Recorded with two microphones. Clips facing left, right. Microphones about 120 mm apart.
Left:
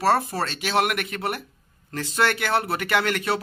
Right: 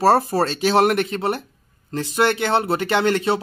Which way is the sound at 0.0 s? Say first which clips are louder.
Right 5 dB; 35° right (ahead or behind).